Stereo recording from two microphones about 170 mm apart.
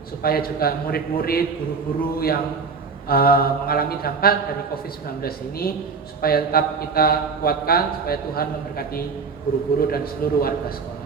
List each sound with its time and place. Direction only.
0.2 s speech: 60° left (ahead or behind)